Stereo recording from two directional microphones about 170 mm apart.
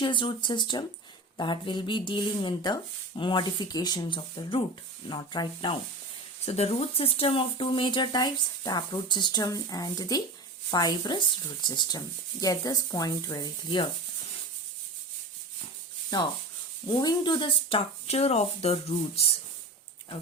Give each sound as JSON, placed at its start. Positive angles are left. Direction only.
{"t": 0.0, "sound": "speech", "side_deg": 30}
{"t": 6.4, "sound": "speech", "side_deg": 40}
{"t": 16.1, "sound": "speech", "side_deg": 25}